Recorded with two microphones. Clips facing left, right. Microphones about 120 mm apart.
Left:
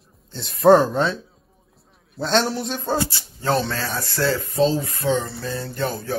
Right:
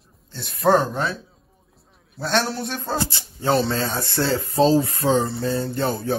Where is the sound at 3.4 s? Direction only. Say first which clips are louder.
Right 2 dB; 25° right (ahead or behind).